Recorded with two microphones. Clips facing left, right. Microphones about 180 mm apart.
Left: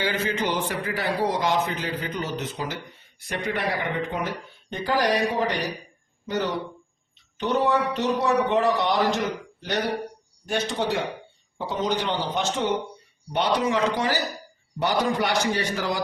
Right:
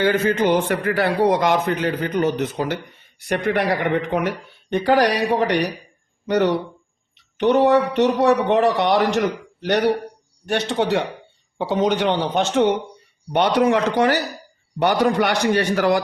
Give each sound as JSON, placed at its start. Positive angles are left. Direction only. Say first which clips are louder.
{"t": 0.0, "sound": "a man's voice", "louder": "right 8 dB", "side_deg": -50}